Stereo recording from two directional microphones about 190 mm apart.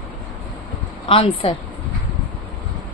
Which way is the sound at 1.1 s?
30° left (ahead or behind).